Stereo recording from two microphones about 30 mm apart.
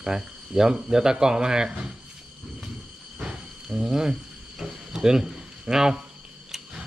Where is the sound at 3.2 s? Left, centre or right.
Right.